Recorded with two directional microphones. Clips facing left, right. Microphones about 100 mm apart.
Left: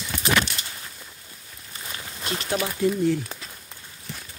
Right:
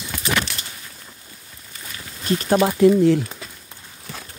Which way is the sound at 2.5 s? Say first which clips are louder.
Right 9 dB; 90° right.